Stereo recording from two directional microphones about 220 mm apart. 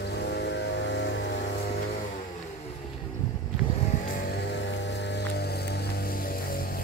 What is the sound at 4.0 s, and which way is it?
Vehicle, 40° left (ahead or behind).